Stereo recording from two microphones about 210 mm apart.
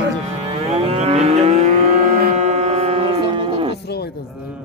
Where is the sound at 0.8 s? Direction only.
30° right (ahead or behind).